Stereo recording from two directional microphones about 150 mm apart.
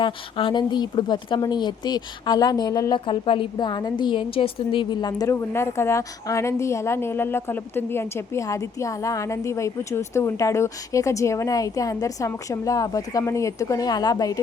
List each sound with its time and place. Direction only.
0.0 s a woman's voice: 35° left (ahead or behind)